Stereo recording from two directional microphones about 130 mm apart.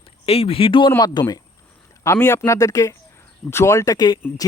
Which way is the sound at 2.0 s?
20° left (ahead or behind).